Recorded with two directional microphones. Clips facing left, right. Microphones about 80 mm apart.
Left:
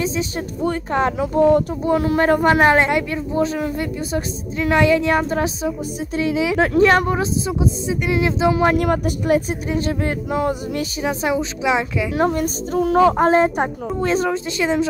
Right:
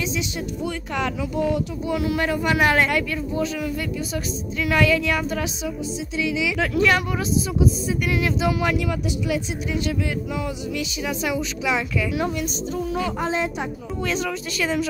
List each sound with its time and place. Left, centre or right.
0.0 s speech: left
8.7 s speech: left
12.1 s a woman's voice: left